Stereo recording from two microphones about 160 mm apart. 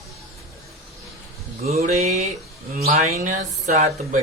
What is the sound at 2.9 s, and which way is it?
Speech, 45° right (ahead or behind).